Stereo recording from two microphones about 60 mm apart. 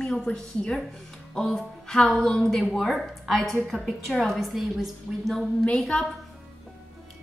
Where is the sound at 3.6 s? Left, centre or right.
Centre.